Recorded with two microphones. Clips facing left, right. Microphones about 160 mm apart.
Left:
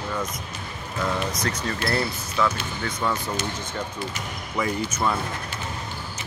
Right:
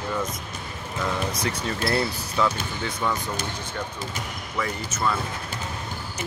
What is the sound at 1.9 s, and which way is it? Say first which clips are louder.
Speech: right 1 dB; 15° right (ahead or behind).